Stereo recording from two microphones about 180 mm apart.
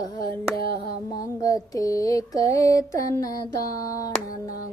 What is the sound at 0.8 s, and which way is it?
Female singing, 20° left (ahead or behind).